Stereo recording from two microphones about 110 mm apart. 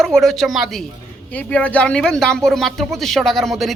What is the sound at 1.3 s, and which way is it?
Speech, 15° left (ahead or behind).